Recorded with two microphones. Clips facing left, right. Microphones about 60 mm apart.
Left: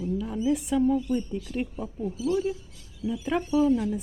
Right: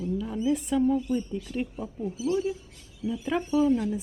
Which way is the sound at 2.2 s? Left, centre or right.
Centre.